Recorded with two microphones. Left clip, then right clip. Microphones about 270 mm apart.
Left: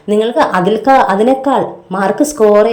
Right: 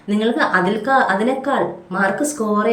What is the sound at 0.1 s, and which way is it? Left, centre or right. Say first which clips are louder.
A woman's voice: left 6 dB; centre.